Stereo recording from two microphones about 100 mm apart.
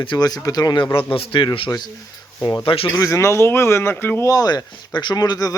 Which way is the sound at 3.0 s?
30° left (ahead or behind).